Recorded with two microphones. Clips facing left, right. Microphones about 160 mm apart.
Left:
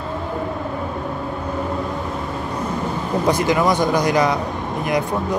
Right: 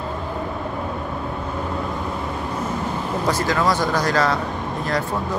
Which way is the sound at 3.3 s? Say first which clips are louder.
Left 3 dB; 15° left (ahead or behind).